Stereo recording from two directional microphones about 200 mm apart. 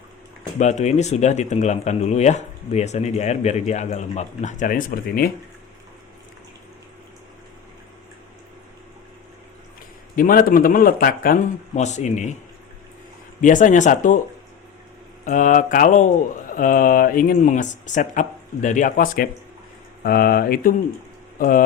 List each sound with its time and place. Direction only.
0.6 s speech: 35° left (ahead or behind)
10.2 s speech: 45° left (ahead or behind)
11.8 s speech: 35° left (ahead or behind)
13.4 s speech: 40° left (ahead or behind)
15.2 s speech: 40° left (ahead or behind)